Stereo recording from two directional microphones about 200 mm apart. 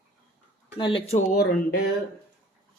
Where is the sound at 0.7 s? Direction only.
25° left (ahead or behind).